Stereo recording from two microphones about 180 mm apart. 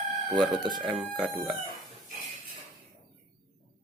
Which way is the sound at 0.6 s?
25° right (ahead or behind).